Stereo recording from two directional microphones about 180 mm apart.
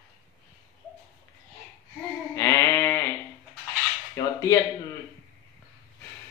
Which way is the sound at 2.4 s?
15° left (ahead or behind).